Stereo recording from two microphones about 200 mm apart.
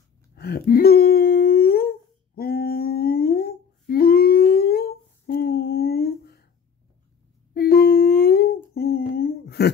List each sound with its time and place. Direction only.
0.4 s humming: 50° left (ahead or behind)
7.5 s humming: 45° left (ahead or behind)
8.7 s a sound: 50° left (ahead or behind)